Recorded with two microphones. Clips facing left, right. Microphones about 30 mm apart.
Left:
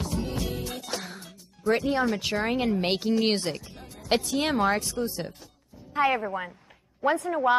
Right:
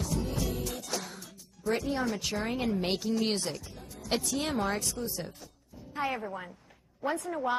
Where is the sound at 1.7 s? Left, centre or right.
Left.